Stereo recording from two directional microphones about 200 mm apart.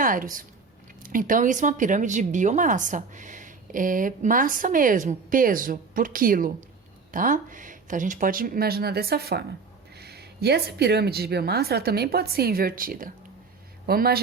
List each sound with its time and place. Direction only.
0.0 s a woman's voice: 45° right (ahead or behind)